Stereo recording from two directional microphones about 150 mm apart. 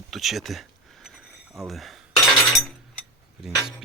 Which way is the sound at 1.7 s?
Centre (ahead or behind).